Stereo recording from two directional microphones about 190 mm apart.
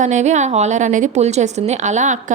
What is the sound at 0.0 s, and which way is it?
A woman's voice, 40° right (ahead or behind).